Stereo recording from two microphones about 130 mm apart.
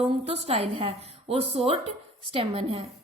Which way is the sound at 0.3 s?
50° right (ahead or behind).